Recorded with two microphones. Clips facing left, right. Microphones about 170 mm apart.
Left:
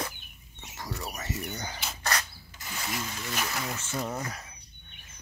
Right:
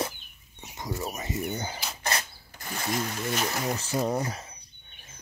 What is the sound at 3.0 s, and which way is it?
Speech, 45° right (ahead or behind).